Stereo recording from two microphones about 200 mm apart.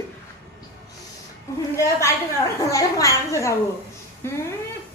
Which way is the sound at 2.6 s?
15° left (ahead or behind).